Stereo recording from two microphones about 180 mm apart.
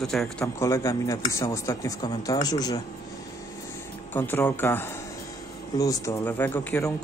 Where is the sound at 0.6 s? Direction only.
15° left (ahead or behind).